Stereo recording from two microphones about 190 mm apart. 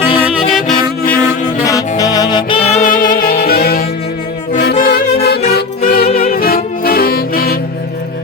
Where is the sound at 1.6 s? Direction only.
20° left (ahead or behind).